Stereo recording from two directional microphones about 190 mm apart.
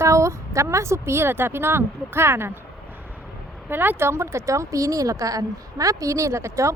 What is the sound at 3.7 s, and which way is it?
A woman's voice, 10° right (ahead or behind).